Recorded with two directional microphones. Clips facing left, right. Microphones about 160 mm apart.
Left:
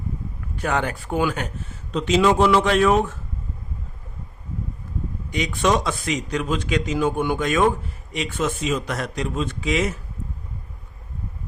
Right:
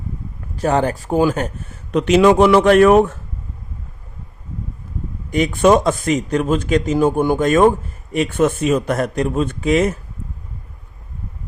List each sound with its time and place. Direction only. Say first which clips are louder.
0.5 s speech: right 7 dB; 40° right (ahead or behind)
1.7 s speech: right 6 dB; 65° right (ahead or behind)
5.3 s a man's voice: right 8 dB; 50° right (ahead or behind)